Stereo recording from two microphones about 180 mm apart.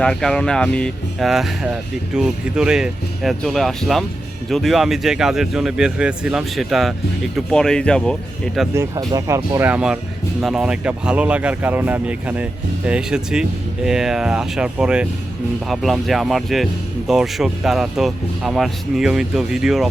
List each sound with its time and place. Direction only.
0.0 s speech: 5° left (ahead or behind)
8.7 s speech: 15° right (ahead or behind); by 19.9 s centre (ahead or behind)